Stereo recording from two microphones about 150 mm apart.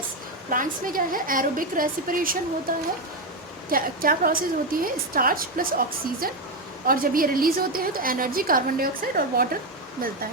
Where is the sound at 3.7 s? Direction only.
70° right (ahead or behind).